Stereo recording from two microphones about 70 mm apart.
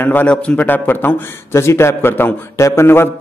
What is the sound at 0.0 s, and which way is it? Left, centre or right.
A man's voice, left.